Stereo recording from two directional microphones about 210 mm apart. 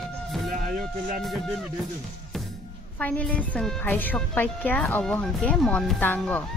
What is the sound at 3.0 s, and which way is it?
Speech, 5° left (ahead or behind).